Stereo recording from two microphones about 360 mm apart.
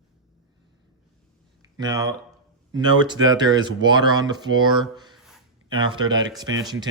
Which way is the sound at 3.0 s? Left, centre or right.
Centre.